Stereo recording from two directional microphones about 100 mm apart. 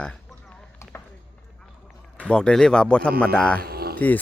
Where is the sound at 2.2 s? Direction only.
10° left (ahead or behind).